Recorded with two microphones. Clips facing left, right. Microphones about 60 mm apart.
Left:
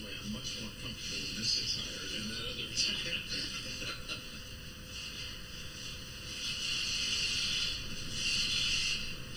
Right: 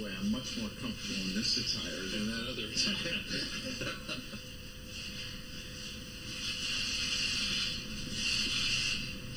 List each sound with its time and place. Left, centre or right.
1.0 s speech: right
6.4 s vehicle: right
7.5 s a sound: right